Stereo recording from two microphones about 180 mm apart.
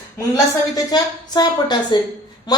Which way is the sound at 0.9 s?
20° left (ahead or behind).